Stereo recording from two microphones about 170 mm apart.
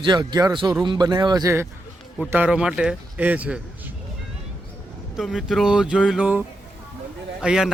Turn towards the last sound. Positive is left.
turn(degrees=-5)  # may be behind; listen again after turning